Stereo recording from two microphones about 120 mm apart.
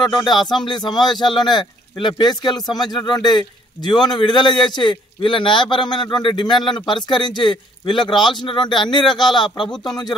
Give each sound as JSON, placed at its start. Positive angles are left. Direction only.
{"t": 0.1, "sound": "speech", "side_deg": 40}